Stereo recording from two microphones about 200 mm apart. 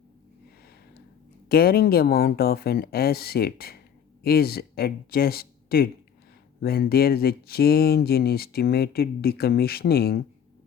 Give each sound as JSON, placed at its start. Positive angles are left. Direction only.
{"t": 1.5, "sound": "speech", "side_deg": 50}